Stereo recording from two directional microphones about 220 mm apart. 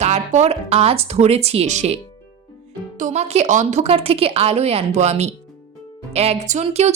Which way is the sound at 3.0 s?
30° right (ahead or behind).